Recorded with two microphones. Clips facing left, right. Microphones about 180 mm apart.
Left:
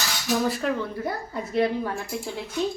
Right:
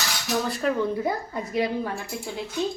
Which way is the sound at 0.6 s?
Centre (ahead or behind).